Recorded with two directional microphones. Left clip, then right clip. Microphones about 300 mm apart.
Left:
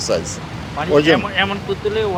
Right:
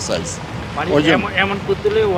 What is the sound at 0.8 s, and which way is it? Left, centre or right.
Speech, centre.